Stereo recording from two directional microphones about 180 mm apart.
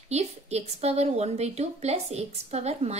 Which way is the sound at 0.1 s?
35° right (ahead or behind).